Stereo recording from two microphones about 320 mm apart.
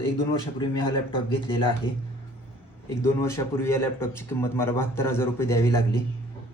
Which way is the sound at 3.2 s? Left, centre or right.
Centre.